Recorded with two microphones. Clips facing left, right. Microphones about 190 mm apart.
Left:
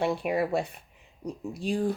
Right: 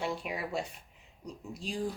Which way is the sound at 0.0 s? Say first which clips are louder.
Left 9 dB; 60° left (ahead or behind).